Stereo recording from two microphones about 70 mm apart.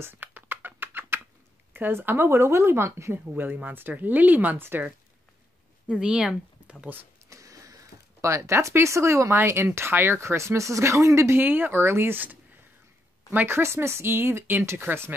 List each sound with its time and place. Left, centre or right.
0.0 s a sound: right
1.7 s speech: right
3.5 s speech: right
5.9 s speech: centre
7.2 s speech: right
10.2 s speech: right
11.3 s speech: right
13.6 s speech: right